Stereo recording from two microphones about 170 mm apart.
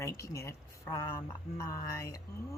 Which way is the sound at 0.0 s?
15° left (ahead or behind).